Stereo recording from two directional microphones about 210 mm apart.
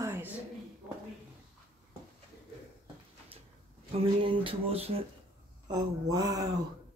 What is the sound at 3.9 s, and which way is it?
Speech, 25° right (ahead or behind).